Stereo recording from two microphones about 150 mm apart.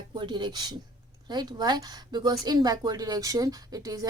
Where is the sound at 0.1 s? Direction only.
30° right (ahead or behind).